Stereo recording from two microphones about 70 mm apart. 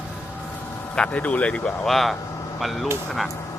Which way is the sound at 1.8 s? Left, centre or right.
Centre.